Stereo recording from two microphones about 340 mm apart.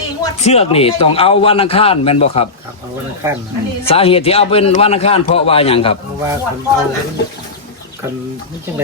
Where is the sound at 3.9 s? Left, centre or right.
Centre.